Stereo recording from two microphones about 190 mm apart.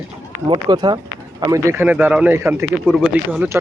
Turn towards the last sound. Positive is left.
turn(degrees=-10)  # may be behind; listen again after turning